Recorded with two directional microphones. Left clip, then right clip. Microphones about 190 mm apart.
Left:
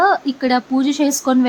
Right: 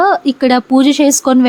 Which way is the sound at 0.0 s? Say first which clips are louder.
Right 4 dB; 35° right (ahead or behind).